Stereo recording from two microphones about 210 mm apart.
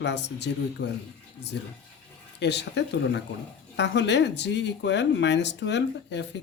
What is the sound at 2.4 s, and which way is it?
Speech, 55° left (ahead or behind).